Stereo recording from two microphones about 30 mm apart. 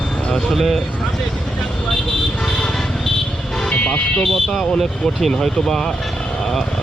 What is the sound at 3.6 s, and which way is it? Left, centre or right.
Vehicle, left.